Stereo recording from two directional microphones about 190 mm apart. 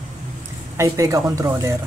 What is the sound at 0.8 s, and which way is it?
Speech, 15° right (ahead or behind).